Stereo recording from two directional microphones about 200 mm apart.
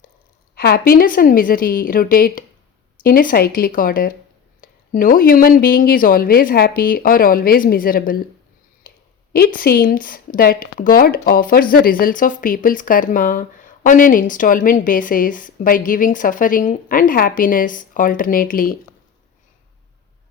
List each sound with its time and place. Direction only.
0.5 s speech: 50° left (ahead or behind)
9.3 s speech: 50° left (ahead or behind)